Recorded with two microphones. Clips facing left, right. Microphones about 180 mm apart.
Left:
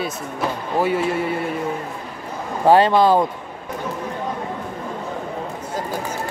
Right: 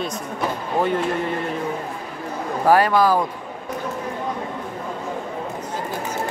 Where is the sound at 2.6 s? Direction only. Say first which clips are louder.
Left 3 dB; 25° left (ahead or behind).